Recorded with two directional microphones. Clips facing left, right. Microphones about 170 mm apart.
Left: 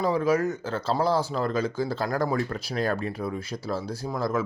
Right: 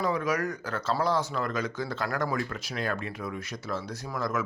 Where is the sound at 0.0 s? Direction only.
30° left (ahead or behind).